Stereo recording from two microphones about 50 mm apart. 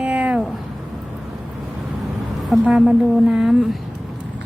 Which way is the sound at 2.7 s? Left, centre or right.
Centre.